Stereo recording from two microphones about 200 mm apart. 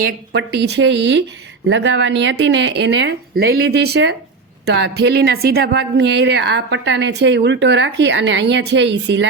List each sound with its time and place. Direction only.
0.0 s a woman's voice: 55° right (ahead or behind)